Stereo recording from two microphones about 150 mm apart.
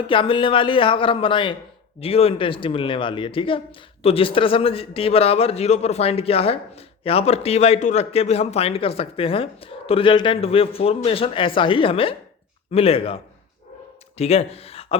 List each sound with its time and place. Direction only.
0.1 s a woman's voice: 35° left (ahead or behind)
14.2 s speech: 45° left (ahead or behind)